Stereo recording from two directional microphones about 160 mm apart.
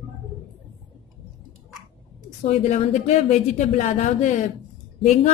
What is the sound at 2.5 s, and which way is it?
Speech, 40° left (ahead or behind).